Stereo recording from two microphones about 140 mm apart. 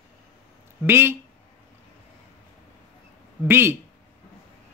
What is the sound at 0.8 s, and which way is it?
Speech, 15° right (ahead or behind).